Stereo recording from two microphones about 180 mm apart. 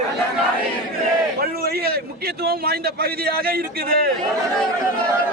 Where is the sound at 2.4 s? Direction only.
60° right (ahead or behind).